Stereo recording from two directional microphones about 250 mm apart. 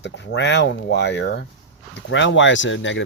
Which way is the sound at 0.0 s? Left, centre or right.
Left.